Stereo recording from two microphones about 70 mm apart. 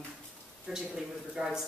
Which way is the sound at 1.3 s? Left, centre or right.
Centre.